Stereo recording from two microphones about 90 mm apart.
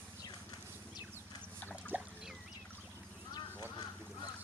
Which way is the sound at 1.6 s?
15° left (ahead or behind).